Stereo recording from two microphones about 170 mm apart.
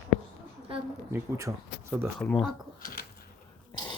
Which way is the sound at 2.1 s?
5° left (ahead or behind).